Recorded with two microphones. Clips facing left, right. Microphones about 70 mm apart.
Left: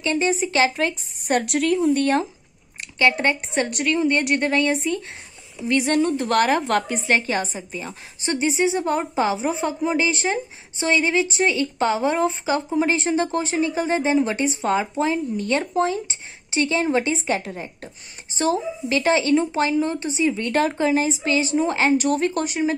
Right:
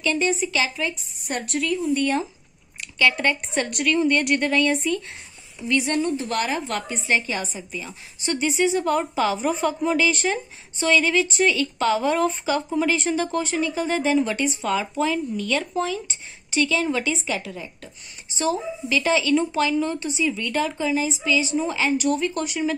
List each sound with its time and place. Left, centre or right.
0.0 s a woman's voice: left
0.6 s a woman's voice: left
1.4 s a woman's voice: left
2.8 s a woman's voice: left
6.0 s a woman's voice: left
20.5 s a woman's voice: left